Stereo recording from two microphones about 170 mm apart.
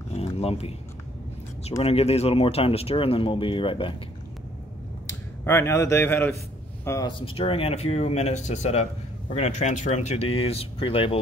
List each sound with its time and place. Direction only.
0.1 s a sound: 35° left (ahead or behind)
1.8 s speech: 35° left (ahead or behind)
5.0 s speech: 15° left (ahead or behind)
7.1 s speech: 30° left (ahead or behind)